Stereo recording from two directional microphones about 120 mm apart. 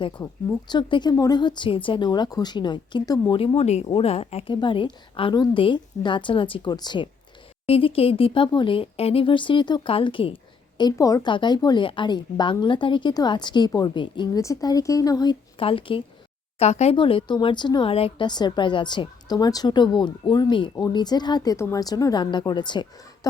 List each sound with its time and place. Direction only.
0.7 s a woman's voice: 40° left (ahead or behind)
3.4 s speech: 55° left (ahead or behind)
3.8 s speech: 50° left (ahead or behind)
4.6 s a woman's voice: 45° left (ahead or behind)
7.7 s speech: 50° left (ahead or behind); by 11.3 s 30° left (ahead or behind)
11.3 s a woman's voice: 40° left (ahead or behind)
14.4 s a woman's voice: 30° left (ahead or behind); by 16.0 s 45° left (ahead or behind)
16.6 s speech: 65° left (ahead or behind)
16.9 s a woman's voice: 45° left (ahead or behind)
17.9 s speech: 55° left (ahead or behind)
18.3 s a woman's voice: 35° left (ahead or behind)